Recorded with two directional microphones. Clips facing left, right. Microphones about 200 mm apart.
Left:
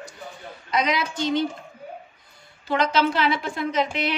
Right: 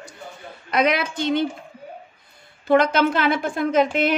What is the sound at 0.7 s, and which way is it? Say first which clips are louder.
Speech: right 4 dB; 60° right (ahead or behind).